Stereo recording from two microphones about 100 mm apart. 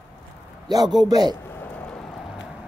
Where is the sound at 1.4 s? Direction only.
20° left (ahead or behind).